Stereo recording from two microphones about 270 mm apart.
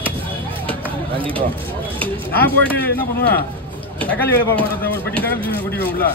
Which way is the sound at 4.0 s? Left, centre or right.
Centre.